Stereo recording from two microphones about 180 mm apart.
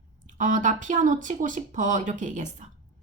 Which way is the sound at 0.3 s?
45° right (ahead or behind).